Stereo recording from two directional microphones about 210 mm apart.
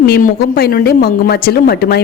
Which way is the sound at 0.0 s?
45° left (ahead or behind).